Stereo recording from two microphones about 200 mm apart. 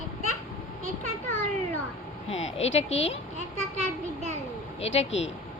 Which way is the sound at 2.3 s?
30° left (ahead or behind).